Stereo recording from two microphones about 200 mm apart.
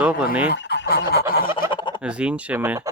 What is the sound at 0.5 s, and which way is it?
Fowl, 55° left (ahead or behind).